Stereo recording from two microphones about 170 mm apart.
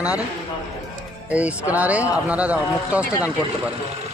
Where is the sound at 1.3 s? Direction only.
10° right (ahead or behind).